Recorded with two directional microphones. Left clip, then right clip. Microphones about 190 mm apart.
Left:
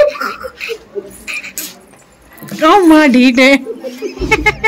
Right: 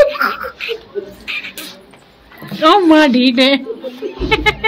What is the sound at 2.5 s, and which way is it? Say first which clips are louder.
A woman's voice: left 2 dB; 20° left (ahead or behind).